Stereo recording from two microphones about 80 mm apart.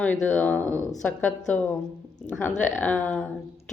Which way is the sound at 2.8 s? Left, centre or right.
Left.